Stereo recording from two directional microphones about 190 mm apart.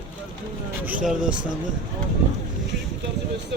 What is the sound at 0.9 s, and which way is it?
Speech, 5° right (ahead or behind).